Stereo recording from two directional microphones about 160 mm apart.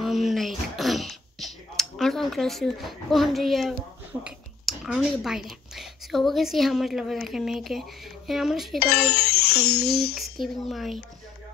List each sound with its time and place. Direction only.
0.0 s a sound: centre (ahead or behind)
4.2 s speech: 5° right (ahead or behind)
9.0 s music: 80° left
10.1 s speech: centre (ahead or behind)